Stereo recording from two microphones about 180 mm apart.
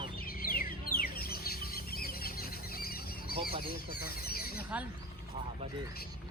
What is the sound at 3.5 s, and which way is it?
Speech, 30° right (ahead or behind).